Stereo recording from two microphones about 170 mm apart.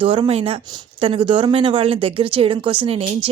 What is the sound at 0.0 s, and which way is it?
A woman's voice, 30° right (ahead or behind).